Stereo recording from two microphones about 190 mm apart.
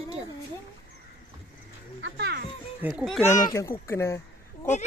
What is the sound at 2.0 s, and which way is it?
Children playing, 60° right (ahead or behind).